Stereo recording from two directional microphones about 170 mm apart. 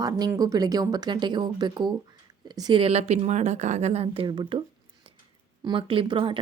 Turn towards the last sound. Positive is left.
turn(degrees=-30)  # may be behind; listen again after turning